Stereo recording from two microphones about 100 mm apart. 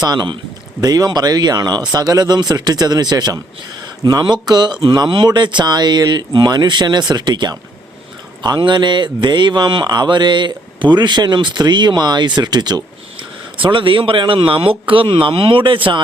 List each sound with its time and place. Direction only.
0.0 s speech: 45° right (ahead or behind)